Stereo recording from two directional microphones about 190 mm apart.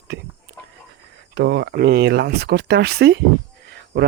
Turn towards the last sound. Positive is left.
turn(degrees=-55)  # may be behind; listen again after turning